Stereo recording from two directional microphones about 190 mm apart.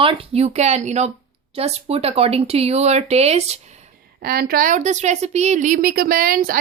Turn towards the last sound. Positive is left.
turn(degrees=-50)  # may be behind; listen again after turning